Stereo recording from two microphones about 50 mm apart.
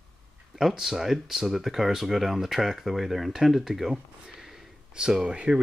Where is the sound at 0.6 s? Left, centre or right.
Centre.